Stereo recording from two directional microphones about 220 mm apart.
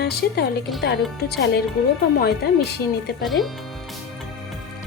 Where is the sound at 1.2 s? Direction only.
50° left (ahead or behind).